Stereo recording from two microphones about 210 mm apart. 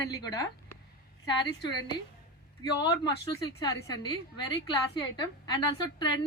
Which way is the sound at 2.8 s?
20° left (ahead or behind).